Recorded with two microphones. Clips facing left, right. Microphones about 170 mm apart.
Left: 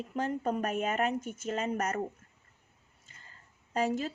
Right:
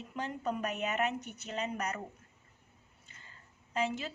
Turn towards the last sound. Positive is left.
turn(degrees=45)  # may be behind; listen again after turning